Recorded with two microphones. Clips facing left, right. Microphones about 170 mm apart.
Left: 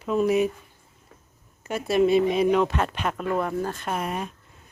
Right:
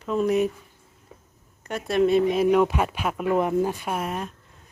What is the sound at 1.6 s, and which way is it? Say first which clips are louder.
Speech: left 1 dB; 5° left (ahead or behind).